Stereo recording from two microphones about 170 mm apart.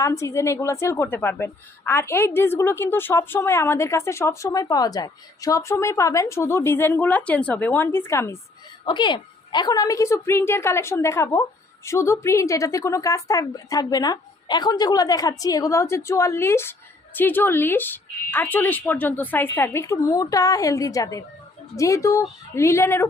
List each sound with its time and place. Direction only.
0.0 s a woman's voice: 15° left (ahead or behind)
8.8 s a woman's voice: 30° left (ahead or behind)